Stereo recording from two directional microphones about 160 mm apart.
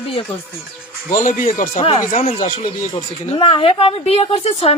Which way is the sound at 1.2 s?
55° left (ahead or behind).